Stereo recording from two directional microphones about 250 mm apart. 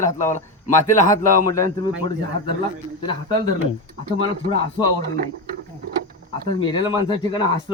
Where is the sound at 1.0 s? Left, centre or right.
Centre.